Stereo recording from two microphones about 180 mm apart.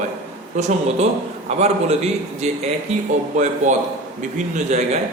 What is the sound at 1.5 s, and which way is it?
A man's voice, 35° right (ahead or behind).